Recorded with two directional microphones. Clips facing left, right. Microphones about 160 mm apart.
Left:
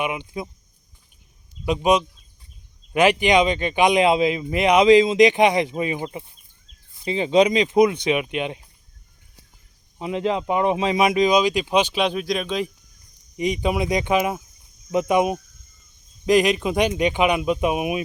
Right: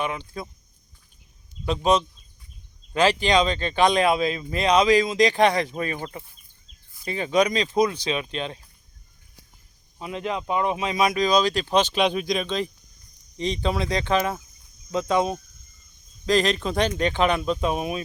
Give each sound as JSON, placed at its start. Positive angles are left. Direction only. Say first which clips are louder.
{"t": 0.0, "sound": "speech", "louder": "left 3 dB", "side_deg": 15}
{"t": 1.6, "sound": "speech", "louder": "left 2 dB", "side_deg": 15}
{"t": 10.0, "sound": "speech", "louder": "left 6 dB", "side_deg": 20}